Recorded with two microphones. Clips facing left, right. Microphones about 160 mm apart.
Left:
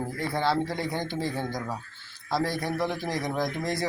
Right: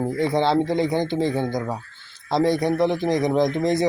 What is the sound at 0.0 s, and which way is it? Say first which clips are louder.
Speech: right 7 dB; 20° right (ahead or behind).